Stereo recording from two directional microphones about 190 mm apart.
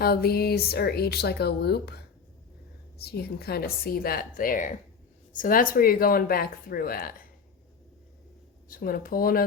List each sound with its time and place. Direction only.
0.0 s speech: 55° left (ahead or behind)
3.0 s speech: 55° left (ahead or behind)
8.7 s speech: 50° left (ahead or behind)